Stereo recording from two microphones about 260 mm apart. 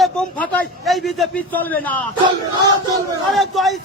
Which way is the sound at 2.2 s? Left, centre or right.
Centre.